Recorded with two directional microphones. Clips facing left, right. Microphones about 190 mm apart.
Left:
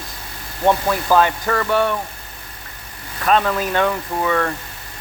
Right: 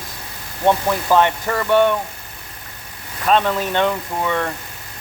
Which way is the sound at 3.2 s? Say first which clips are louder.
Even; 25° right (ahead or behind).